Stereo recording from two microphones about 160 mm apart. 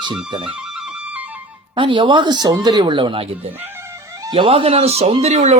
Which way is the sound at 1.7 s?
30° right (ahead or behind).